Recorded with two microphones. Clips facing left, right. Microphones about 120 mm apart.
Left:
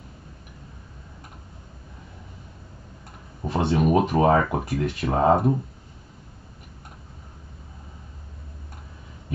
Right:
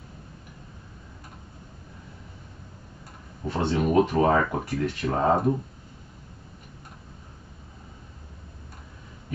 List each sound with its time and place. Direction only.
3.5 s speech: 20° left (ahead or behind)